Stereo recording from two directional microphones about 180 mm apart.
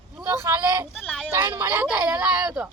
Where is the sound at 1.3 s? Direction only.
15° right (ahead or behind).